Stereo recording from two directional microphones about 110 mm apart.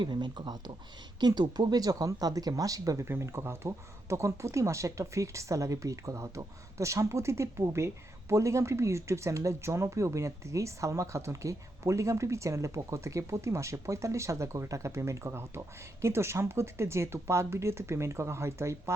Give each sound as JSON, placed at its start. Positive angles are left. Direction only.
{"t": 0.0, "sound": "speech", "side_deg": -45}